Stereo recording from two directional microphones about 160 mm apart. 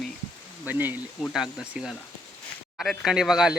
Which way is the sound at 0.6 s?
10° right (ahead or behind).